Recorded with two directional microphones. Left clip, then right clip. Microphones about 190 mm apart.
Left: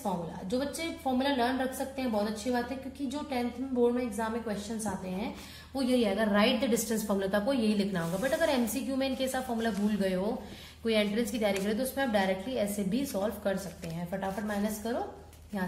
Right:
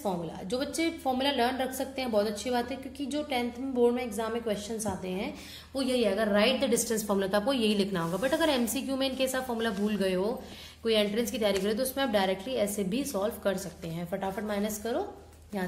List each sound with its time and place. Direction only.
0.0 s a woman's voice: 40° right (ahead or behind)
5.8 s a woman's voice: 25° right (ahead or behind)